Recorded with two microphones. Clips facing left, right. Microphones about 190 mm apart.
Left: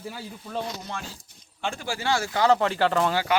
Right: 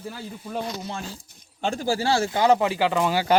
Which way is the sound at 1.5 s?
40° right (ahead or behind).